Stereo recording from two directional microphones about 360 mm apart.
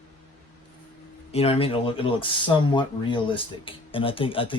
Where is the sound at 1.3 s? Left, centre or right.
Centre.